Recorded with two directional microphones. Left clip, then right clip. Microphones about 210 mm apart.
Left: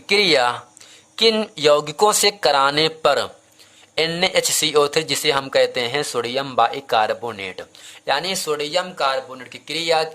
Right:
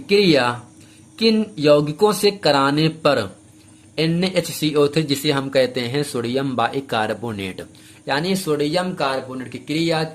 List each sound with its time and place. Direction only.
0.1 s speech: 30° left (ahead or behind)